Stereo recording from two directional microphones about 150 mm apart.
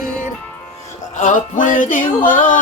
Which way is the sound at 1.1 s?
60° left (ahead or behind).